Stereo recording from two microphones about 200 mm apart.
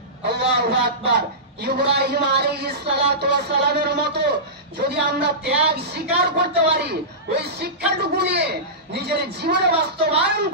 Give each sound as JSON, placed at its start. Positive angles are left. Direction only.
{"t": 0.2, "sound": "a man's voice", "side_deg": -55}